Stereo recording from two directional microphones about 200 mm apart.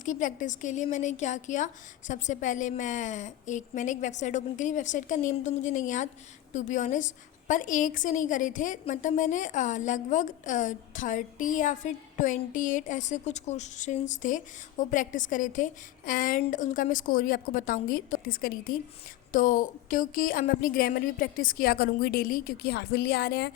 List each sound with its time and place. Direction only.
0.0 s a woman's voice: 40° left (ahead or behind)